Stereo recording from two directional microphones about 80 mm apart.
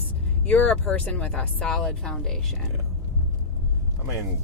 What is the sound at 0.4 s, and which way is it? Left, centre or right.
Speech, centre.